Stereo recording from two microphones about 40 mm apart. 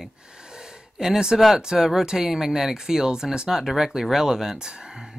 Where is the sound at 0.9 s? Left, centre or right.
Centre.